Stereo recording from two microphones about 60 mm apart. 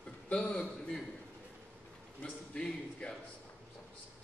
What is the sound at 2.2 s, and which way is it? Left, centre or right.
Speech, centre.